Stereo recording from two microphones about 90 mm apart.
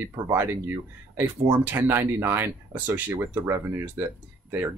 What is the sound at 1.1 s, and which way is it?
Speech, 20° right (ahead or behind).